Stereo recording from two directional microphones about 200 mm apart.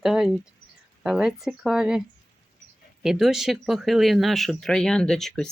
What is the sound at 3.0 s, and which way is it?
Speech, centre (ahead or behind).